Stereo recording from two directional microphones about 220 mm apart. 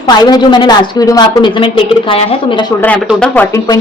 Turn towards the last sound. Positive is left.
turn(degrees=10)  # may be behind; listen again after turning